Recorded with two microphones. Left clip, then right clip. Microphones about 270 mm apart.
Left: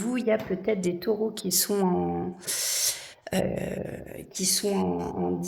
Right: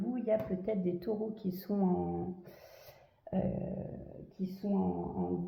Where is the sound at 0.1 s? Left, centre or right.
Left.